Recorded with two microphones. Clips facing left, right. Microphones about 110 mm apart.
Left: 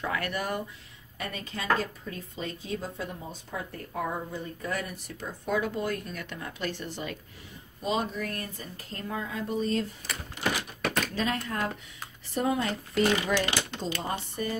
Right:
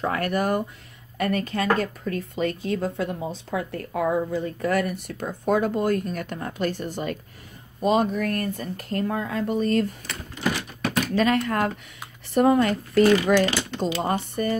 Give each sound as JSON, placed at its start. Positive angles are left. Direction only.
{"t": 0.0, "sound": "speech", "side_deg": -45}
{"t": 1.1, "sound": "speech", "side_deg": -60}
{"t": 11.1, "sound": "speech", "side_deg": -70}